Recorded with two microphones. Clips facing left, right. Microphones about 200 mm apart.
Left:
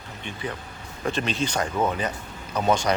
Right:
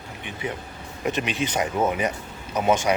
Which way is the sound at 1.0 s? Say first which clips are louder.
Right 1 dB; 15° right (ahead or behind).